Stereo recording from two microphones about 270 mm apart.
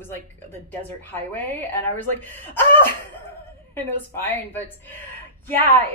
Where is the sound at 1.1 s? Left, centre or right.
Centre.